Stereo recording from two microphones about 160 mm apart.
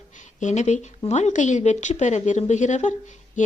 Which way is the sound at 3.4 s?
50° left (ahead or behind).